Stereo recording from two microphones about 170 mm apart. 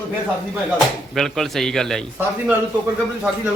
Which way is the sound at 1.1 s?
Centre (ahead or behind).